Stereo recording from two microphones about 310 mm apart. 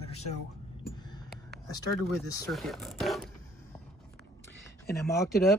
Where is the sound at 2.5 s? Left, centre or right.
Centre.